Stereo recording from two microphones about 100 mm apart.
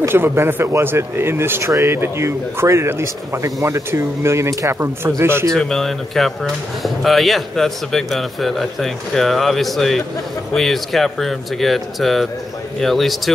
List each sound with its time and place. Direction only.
0.0 s speech: 25° right (ahead or behind)
5.5 s a man's voice: 5° left (ahead or behind)